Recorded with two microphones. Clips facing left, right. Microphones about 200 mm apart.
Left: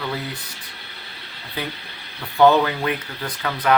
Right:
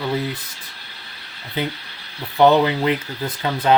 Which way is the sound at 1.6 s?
20° right (ahead or behind).